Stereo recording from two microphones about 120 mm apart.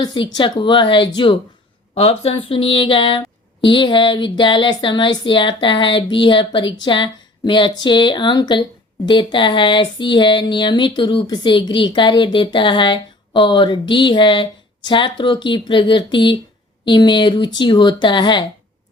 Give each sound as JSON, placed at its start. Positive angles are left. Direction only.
{"t": 0.0, "sound": "speech", "side_deg": 35}
{"t": 2.0, "sound": "a sound", "side_deg": 55}
{"t": 16.8, "sound": "speech", "side_deg": 40}